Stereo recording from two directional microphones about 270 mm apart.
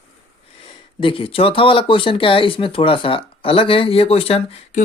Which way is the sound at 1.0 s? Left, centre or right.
Centre.